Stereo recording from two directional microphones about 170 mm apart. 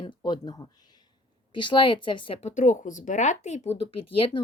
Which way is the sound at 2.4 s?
45° left (ahead or behind).